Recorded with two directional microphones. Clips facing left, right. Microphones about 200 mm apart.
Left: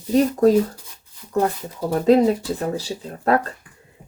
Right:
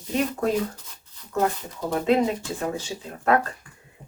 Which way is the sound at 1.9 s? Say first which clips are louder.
Left 6 dB; 35° left (ahead or behind).